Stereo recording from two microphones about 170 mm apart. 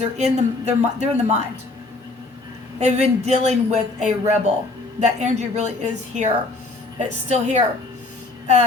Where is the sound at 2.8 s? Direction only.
40° right (ahead or behind).